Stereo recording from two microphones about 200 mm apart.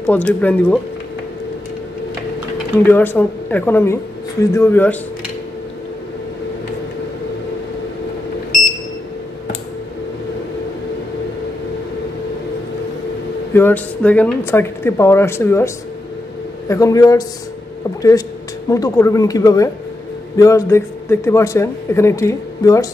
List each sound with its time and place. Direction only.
0.0 s a man's voice: 5° left (ahead or behind)
2.9 s a man's voice: 10° left (ahead or behind)
13.5 s a man's voice: 10° left (ahead or behind)
18.7 s a man's voice: 15° left (ahead or behind)